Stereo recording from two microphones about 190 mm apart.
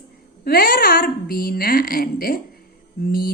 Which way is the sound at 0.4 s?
50° left (ahead or behind).